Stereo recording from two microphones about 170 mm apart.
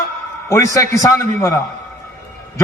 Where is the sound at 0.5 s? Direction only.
20° left (ahead or behind).